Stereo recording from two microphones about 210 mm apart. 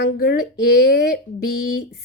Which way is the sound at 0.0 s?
50° left (ahead or behind).